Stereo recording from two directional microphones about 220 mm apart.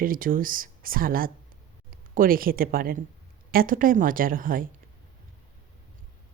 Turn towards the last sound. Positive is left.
turn(degrees=-40)  # may be behind; listen again after turning